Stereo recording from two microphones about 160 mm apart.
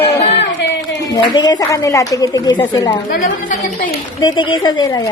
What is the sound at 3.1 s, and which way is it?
Speech, 60° left (ahead or behind).